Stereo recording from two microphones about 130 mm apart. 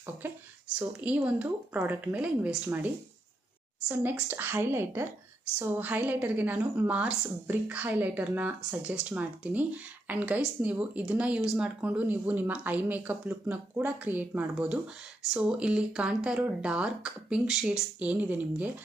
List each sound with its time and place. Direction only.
0.2 s speech: 15° right (ahead or behind)